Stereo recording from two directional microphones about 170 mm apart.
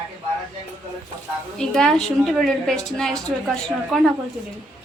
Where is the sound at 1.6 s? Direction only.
5° left (ahead or behind).